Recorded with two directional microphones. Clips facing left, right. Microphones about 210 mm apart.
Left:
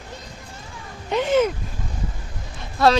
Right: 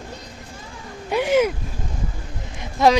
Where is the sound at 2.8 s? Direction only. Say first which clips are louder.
Right 1 dB; 20° right (ahead or behind).